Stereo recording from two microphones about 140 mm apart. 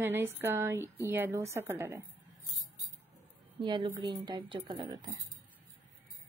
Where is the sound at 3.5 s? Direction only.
35° right (ahead or behind).